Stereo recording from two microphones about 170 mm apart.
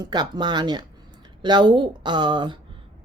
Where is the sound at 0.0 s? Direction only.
25° right (ahead or behind).